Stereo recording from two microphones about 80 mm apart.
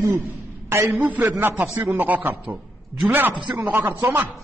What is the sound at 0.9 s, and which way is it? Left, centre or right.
A man's voice, centre.